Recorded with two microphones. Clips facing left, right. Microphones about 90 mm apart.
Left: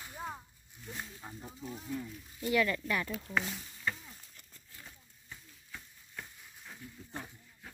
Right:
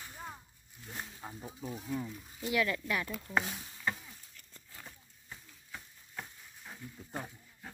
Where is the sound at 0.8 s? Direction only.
5° right (ahead or behind).